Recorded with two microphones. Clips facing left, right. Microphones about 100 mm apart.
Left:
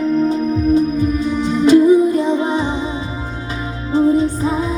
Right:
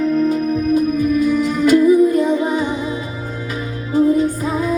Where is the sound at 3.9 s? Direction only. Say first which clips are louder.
Even; 30° left (ahead or behind).